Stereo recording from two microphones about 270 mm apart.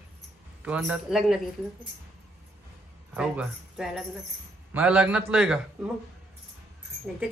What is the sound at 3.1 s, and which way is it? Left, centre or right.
Speech, centre.